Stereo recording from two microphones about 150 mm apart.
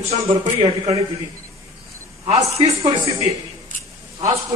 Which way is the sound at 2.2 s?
45° right (ahead or behind).